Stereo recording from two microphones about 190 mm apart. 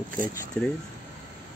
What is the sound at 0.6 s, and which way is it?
Speech, 10° left (ahead or behind).